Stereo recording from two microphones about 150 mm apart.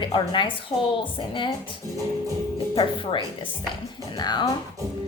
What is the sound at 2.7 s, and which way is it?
A woman's voice, 35° left (ahead or behind).